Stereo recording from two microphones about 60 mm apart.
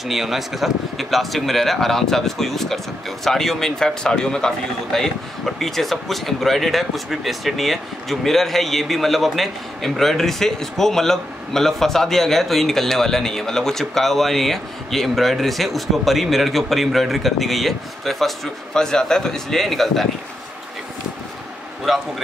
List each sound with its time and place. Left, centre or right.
0.1 s speech: centre
21.9 s speech: centre